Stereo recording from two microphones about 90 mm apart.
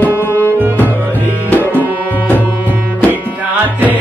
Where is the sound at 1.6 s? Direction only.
20° right (ahead or behind).